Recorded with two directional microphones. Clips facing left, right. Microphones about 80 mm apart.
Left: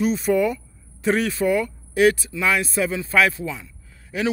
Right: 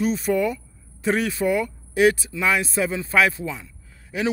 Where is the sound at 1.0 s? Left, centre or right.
Centre.